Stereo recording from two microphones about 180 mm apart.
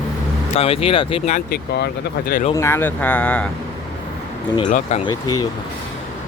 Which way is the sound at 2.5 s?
15° left (ahead or behind).